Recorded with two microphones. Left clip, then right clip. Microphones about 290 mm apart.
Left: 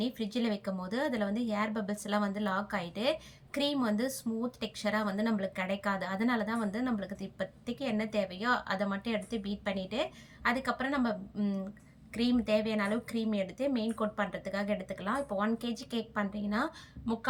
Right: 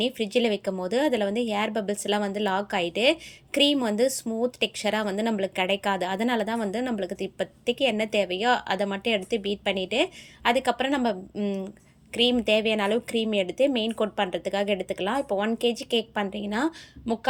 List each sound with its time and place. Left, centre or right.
0.0 s speech: centre
12.1 s speech: centre